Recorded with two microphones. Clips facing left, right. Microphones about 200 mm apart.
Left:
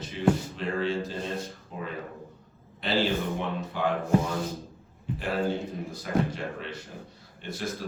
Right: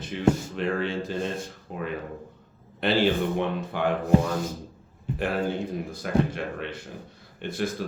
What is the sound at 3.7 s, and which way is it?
Speech, 60° right (ahead or behind).